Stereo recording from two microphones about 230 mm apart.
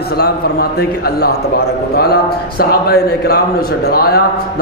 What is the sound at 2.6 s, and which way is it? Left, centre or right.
A man's voice, left.